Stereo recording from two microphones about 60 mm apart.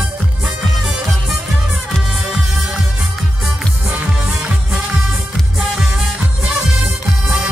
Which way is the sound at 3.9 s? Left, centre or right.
Centre.